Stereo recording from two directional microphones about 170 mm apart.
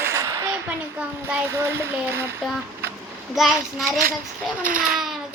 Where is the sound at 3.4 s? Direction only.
Centre (ahead or behind).